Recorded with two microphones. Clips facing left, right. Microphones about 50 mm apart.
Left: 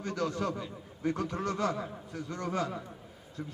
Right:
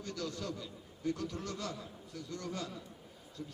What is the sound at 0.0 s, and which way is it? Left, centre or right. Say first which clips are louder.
A man's voice: left 8 dB; left.